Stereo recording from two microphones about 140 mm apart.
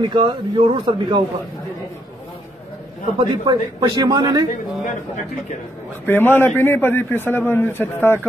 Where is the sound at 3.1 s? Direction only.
35° right (ahead or behind).